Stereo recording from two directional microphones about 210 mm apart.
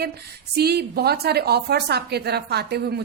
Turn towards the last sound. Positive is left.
turn(degrees=-50)  # may be behind; listen again after turning